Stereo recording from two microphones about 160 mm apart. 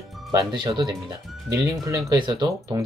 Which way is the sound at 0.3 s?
25° right (ahead or behind).